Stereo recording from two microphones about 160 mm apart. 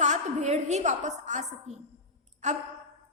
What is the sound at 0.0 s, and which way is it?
A woman's voice, 50° right (ahead or behind).